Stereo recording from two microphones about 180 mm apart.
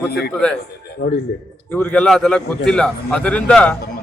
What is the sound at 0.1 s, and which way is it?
Speech, 65° left (ahead or behind).